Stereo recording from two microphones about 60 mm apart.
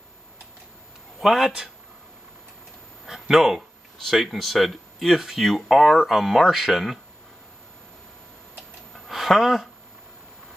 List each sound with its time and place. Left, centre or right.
1.2 s a man's voice: centre
3.1 s speech: centre
9.0 s a sound: centre